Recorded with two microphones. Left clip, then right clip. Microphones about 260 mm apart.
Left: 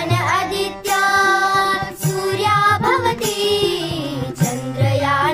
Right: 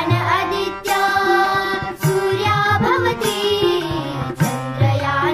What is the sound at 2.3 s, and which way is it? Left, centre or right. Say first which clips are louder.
Music: left 4 dB; left.